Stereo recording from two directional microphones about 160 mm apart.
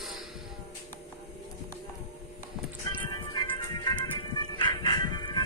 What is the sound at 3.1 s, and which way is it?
Music, 25° left (ahead or behind).